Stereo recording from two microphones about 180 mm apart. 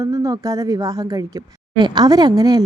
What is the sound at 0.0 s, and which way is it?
A woman's voice, 20° right (ahead or behind).